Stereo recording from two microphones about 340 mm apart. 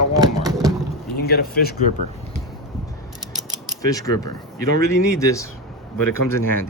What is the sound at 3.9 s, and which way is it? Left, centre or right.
Speech, centre.